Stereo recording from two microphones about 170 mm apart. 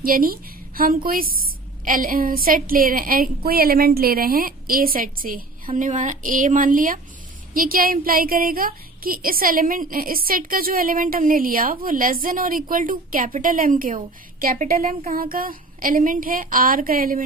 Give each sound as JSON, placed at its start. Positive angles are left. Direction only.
{"t": 0.0, "sound": "speech", "side_deg": -55}